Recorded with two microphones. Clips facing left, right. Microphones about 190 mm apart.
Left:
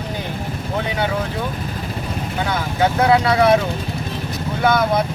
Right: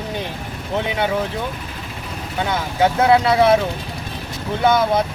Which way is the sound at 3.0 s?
25° right (ahead or behind).